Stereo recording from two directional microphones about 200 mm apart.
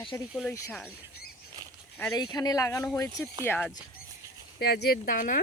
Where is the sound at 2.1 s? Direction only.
20° left (ahead or behind).